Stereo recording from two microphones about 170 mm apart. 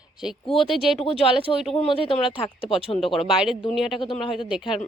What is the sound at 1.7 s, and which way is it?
Speech, 35° left (ahead or behind).